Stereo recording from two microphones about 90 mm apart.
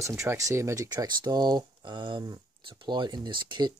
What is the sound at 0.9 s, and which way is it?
Speech, 55° right (ahead or behind).